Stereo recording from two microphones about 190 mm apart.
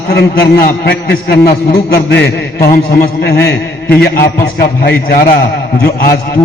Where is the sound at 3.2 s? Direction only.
60° left (ahead or behind).